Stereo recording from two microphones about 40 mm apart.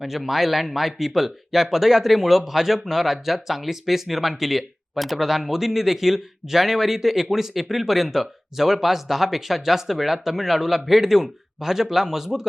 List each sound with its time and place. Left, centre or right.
0.0 s speech: centre